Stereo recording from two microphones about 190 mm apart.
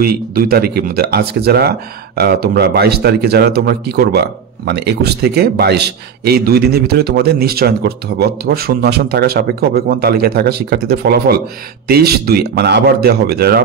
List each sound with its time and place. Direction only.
0.0 s speech: 50° right (ahead or behind)